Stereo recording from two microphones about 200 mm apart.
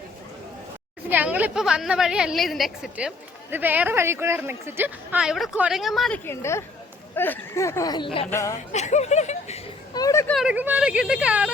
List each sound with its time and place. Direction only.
1.1 s a woman's voice: 10° right (ahead or behind)
6.2 s speech: 15° left (ahead or behind)
8.3 s speech: 15° left (ahead or behind)
8.7 s speech: 35° left (ahead or behind)
9.9 s speech: 15° left (ahead or behind)
10.3 s a woman's voice: 5° right (ahead or behind)